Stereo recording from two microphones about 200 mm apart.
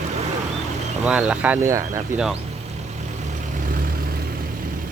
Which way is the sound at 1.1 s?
5° right (ahead or behind).